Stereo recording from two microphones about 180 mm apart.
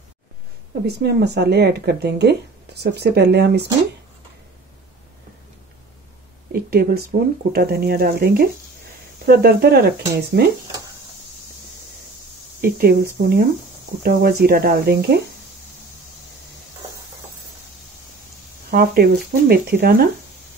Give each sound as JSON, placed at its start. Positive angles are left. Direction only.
{"t": 0.8, "sound": "speech", "side_deg": -65}
{"t": 6.5, "sound": "speech", "side_deg": -60}
{"t": 12.6, "sound": "speech", "side_deg": -55}
{"t": 18.7, "sound": "speech", "side_deg": -60}